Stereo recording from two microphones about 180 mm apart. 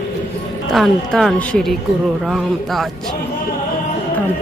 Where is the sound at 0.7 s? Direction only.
Centre (ahead or behind).